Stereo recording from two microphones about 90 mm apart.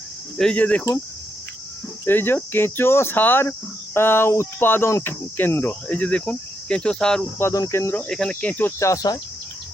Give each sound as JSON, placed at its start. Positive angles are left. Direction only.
{"t": 0.3, "sound": "speech", "side_deg": 10}
{"t": 2.0, "sound": "speech", "side_deg": 25}
{"t": 7.3, "sound": "speech", "side_deg": 30}
{"t": 8.0, "sound": "speech", "side_deg": 10}
{"t": 8.8, "sound": "cricket", "side_deg": 40}